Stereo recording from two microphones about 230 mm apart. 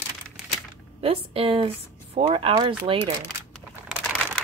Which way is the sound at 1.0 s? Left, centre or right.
Right.